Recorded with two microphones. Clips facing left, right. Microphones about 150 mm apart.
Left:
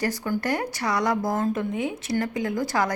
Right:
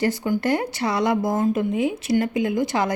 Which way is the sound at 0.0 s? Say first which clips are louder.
Right 4 dB; 25° right (ahead or behind).